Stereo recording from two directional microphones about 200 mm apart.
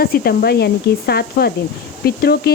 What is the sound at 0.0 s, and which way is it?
Speech, 50° left (ahead or behind).